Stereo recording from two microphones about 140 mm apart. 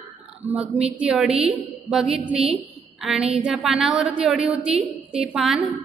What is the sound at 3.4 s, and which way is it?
A woman's voice, 5° right (ahead or behind).